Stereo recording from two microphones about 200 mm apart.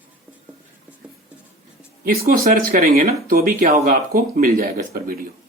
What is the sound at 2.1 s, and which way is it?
Speech, 45° right (ahead or behind).